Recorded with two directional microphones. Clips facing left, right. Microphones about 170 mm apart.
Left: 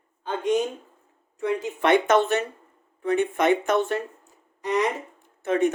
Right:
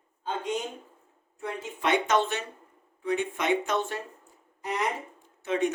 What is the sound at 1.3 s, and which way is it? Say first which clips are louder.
Speech: left 9 dB; 70° left (ahead or behind).